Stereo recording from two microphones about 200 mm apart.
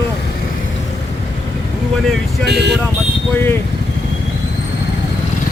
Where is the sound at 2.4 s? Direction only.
55° right (ahead or behind).